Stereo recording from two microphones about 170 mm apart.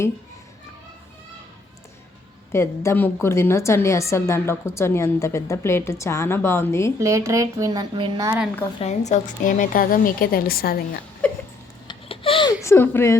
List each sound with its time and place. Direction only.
2.5 s a woman's voice: 15° left (ahead or behind)
7.0 s speech: 15° right (ahead or behind)
8.8 s a woman's voice: 45° left (ahead or behind); by 11.0 s 60° left (ahead or behind)
11.9 s babbling: 30° left (ahead or behind)
12.6 s a woman's voice: 15° left (ahead or behind)